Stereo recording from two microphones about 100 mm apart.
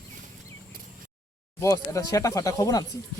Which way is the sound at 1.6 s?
30° left (ahead or behind).